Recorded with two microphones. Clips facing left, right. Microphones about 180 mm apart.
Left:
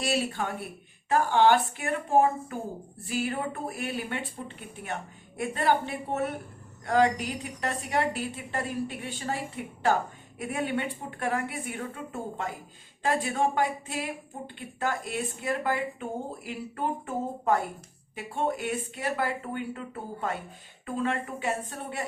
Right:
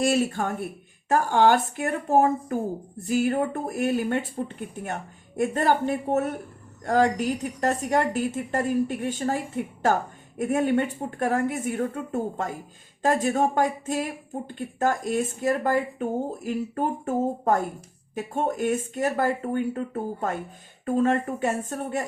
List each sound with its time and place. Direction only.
0.0 s speech: 45° right (ahead or behind)